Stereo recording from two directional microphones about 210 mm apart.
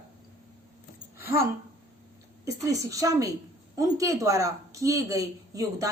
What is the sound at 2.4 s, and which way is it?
A woman's voice, 15° right (ahead or behind).